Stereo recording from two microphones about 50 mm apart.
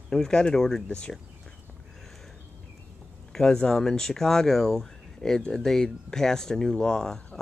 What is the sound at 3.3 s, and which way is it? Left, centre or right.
Speech, centre.